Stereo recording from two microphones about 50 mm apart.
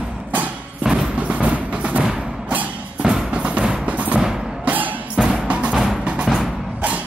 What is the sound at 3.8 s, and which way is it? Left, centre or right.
Music, right.